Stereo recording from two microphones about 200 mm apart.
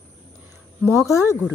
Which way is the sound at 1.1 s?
15° left (ahead or behind).